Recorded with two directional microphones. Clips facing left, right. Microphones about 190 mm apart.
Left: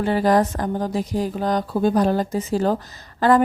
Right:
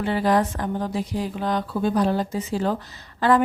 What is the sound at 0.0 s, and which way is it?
Speech, 40° left (ahead or behind).